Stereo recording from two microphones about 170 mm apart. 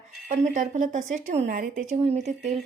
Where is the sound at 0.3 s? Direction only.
45° right (ahead or behind).